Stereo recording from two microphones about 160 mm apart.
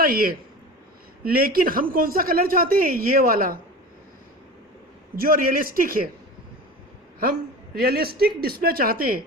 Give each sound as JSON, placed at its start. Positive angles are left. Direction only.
{"t": 0.0, "sound": "speech", "side_deg": -65}
{"t": 5.1, "sound": "speech", "side_deg": -65}
{"t": 7.8, "sound": "speech", "side_deg": -75}